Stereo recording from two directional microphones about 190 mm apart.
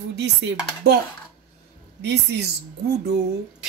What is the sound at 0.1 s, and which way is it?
Chopping, 65° right (ahead or behind).